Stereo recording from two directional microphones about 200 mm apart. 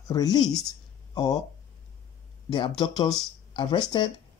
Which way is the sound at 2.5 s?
20° left (ahead or behind).